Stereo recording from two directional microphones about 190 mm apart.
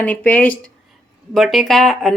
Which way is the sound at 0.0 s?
10° left (ahead or behind).